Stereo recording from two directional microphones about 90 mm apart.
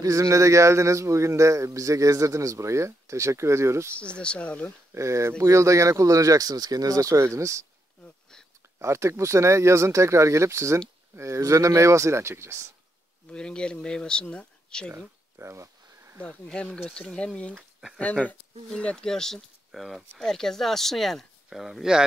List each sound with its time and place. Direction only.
0.0 s a man's voice: 35° right (ahead or behind)
4.2 s speech: 10° left (ahead or behind)
4.9 s a man's voice: 35° right (ahead or behind)
8.7 s a man's voice: 30° right (ahead or behind)
13.3 s speech: 10° left (ahead or behind)
14.9 s a sound: 25° right (ahead or behind)
16.2 s speech: 10° left (ahead or behind); by 22.0 s 5° right (ahead or behind)